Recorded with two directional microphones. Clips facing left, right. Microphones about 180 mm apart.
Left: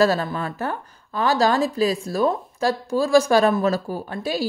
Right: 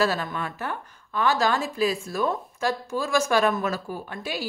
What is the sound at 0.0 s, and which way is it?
A woman's voice, 35° left (ahead or behind).